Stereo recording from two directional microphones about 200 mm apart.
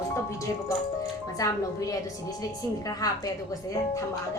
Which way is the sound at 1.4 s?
15° left (ahead or behind).